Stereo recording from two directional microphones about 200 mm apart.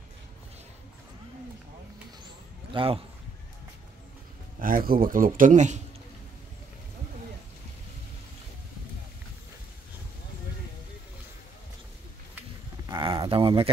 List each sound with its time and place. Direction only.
2.7 s a man's voice: 25° right (ahead or behind)
4.6 s a man's voice: 45° right (ahead or behind)
12.8 s a sound: 25° right (ahead or behind)